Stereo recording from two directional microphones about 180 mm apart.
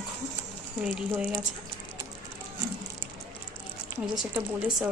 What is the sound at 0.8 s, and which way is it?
Speech, 5° right (ahead or behind).